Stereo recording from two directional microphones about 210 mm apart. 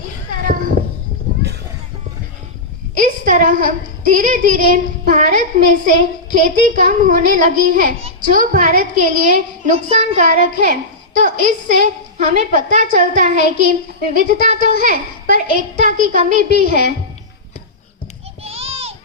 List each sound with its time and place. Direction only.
0.3 s cat: 40° right (ahead or behind)
3.0 s a woman's voice: 35° right (ahead or behind)
18.4 s a sound: 30° right (ahead or behind)